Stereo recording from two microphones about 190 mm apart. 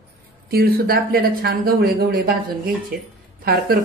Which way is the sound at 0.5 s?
55° right (ahead or behind).